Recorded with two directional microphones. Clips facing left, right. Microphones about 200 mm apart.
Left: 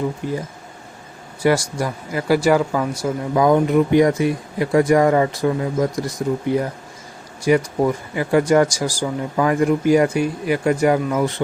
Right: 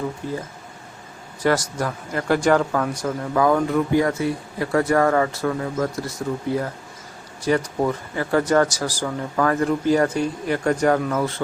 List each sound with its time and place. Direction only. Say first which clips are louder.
0.2 s speech: left 3 dB; 15° left (ahead or behind)